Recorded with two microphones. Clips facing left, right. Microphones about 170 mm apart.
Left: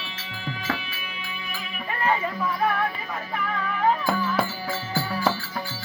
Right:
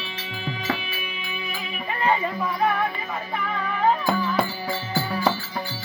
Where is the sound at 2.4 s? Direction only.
Centre (ahead or behind).